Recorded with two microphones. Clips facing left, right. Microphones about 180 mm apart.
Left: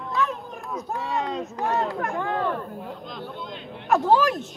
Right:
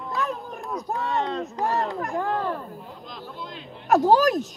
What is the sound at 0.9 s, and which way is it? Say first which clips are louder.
Speech: right 1 dB; centre (ahead or behind).